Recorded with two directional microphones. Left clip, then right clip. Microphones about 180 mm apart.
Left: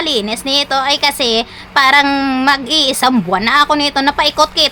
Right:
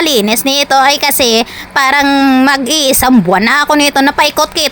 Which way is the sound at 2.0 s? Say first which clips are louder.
Right 6 dB; 25° right (ahead or behind).